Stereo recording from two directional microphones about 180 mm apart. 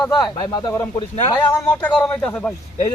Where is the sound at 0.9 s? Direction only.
35° left (ahead or behind).